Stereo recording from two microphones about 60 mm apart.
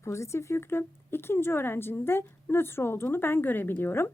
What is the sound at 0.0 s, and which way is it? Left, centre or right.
A woman's voice, left.